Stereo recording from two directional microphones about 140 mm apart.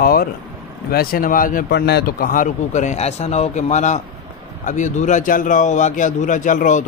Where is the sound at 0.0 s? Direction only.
90° left.